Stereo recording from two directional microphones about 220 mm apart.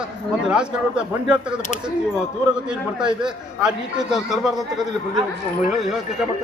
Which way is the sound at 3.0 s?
5° right (ahead or behind).